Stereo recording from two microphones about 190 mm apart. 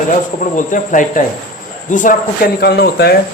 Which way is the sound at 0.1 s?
45° left (ahead or behind).